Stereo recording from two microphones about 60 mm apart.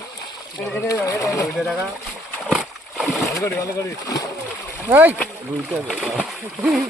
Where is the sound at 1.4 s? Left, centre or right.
Centre.